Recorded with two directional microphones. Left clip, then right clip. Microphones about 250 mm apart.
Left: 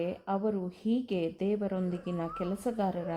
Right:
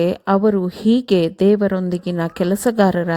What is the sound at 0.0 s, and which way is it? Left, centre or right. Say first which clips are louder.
A woman's voice: right 16 dB; right.